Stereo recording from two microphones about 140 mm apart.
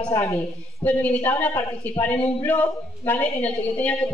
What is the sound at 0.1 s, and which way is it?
A woman's voice, 20° left (ahead or behind).